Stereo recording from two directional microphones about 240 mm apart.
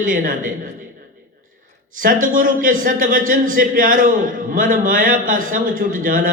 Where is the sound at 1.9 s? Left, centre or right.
Right.